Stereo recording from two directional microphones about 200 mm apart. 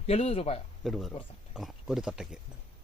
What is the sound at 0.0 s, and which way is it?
Speech, 30° left (ahead or behind).